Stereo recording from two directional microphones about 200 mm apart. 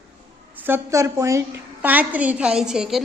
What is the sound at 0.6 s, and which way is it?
Speech, 15° right (ahead or behind).